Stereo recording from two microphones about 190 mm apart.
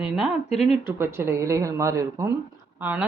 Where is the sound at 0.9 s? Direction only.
15° right (ahead or behind).